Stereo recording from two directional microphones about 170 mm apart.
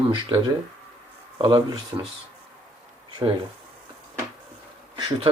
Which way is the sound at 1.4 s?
30° right (ahead or behind).